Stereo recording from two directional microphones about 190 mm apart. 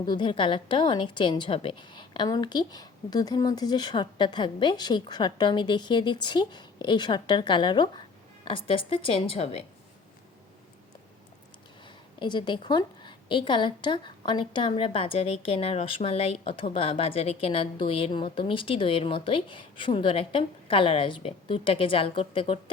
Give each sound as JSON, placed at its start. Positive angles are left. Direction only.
{"t": 0.0, "sound": "a woman's voice", "side_deg": 25}
{"t": 12.2, "sound": "a woman's voice", "side_deg": 25}